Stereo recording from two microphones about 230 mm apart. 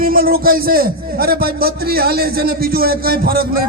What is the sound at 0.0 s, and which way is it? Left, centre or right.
A man's voice, right.